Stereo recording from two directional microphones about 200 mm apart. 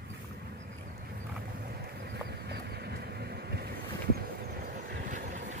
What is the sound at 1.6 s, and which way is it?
Horse, 55° right (ahead or behind).